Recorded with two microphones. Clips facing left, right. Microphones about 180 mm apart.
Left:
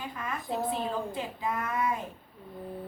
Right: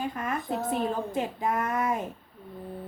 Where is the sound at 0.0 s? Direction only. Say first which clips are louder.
Right 6 dB; 45° right (ahead or behind).